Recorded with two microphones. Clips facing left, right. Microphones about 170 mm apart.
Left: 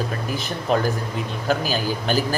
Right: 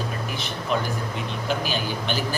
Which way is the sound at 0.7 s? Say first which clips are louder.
Left 5 dB; 40° left (ahead or behind).